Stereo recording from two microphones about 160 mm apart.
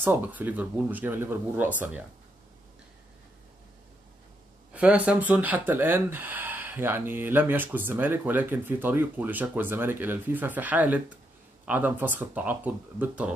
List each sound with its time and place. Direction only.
0.0 s speech: 10° right (ahead or behind)
4.7 s speech: 10° right (ahead or behind)